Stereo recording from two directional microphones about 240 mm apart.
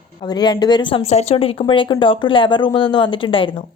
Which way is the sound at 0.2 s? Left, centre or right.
Centre.